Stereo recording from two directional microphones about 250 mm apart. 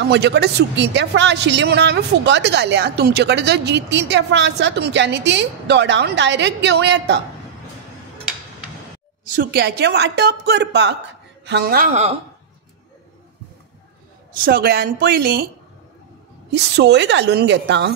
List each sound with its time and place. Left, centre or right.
0.1 s a woman's voice: right
9.2 s a woman's voice: right
14.3 s a woman's voice: right
16.5 s a woman's voice: right